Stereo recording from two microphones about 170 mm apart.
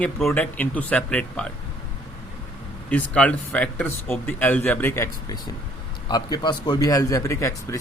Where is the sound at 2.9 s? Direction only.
10° left (ahead or behind).